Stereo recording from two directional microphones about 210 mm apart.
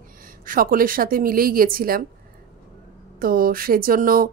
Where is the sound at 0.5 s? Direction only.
40° right (ahead or behind).